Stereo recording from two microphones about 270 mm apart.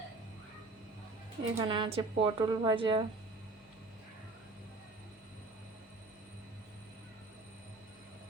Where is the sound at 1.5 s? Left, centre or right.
Centre.